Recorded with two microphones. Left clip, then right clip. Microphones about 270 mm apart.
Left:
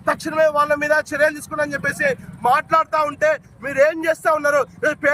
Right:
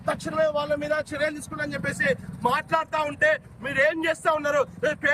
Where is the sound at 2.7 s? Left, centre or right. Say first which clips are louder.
Left 7 dB; centre.